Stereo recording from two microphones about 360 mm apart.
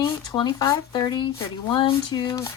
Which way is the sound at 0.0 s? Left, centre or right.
Centre.